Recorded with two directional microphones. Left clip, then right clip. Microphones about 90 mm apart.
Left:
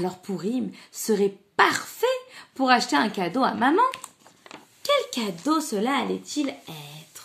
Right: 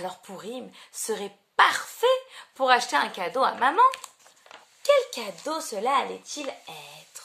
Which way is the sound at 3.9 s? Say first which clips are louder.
Right 3 dB; 30° right (ahead or behind).